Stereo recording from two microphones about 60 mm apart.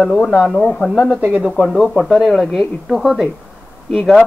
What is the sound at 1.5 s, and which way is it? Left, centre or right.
A woman's voice, centre.